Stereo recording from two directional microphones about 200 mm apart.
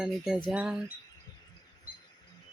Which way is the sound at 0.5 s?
5° right (ahead or behind).